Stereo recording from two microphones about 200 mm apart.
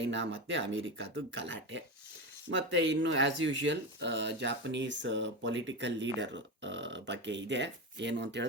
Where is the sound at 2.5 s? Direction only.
85° right.